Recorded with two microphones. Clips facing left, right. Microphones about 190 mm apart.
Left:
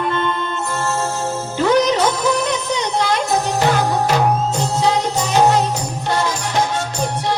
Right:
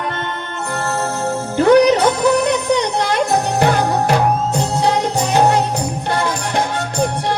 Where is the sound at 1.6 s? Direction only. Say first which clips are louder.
Right 5 dB; 60° right (ahead or behind).